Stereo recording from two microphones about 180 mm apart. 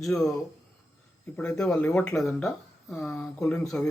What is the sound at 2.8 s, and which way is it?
Speech, centre (ahead or behind).